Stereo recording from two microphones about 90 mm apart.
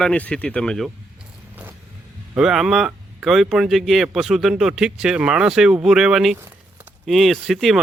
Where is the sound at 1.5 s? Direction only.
20° right (ahead or behind).